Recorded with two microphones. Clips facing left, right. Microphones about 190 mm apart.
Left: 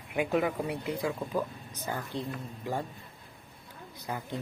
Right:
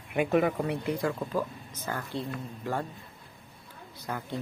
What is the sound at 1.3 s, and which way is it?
Speech, 15° left (ahead or behind).